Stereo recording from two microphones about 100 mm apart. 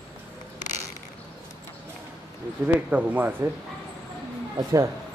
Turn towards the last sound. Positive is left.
turn(degrees=-30)  # may be behind; listen again after turning